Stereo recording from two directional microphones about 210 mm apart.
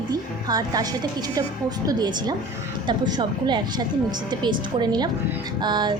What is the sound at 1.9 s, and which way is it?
A woman's voice, 20° right (ahead or behind).